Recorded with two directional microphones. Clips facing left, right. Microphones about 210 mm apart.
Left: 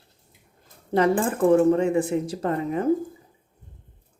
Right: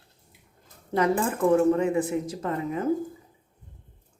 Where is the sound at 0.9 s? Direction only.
30° left (ahead or behind).